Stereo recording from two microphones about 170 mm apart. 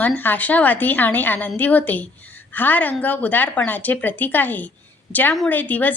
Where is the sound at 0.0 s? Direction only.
10° left (ahead or behind).